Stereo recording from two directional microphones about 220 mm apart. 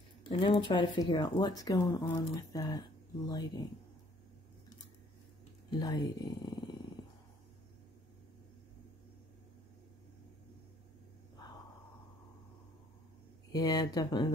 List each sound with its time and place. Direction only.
0.3 s speech: 20° left (ahead or behind)
5.7 s speech: 20° left (ahead or behind)
13.5 s speech: 15° left (ahead or behind)